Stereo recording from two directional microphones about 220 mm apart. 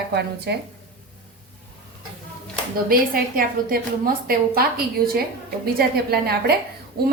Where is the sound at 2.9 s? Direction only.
40° right (ahead or behind).